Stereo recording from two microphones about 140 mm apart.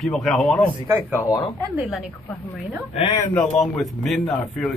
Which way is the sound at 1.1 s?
15° left (ahead or behind).